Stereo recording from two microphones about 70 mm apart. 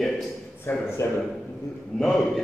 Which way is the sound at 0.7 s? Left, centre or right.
Left.